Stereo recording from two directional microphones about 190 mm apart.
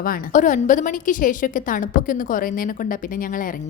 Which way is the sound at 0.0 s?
45° left (ahead or behind).